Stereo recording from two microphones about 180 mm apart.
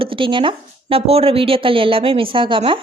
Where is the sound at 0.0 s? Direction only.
30° right (ahead or behind).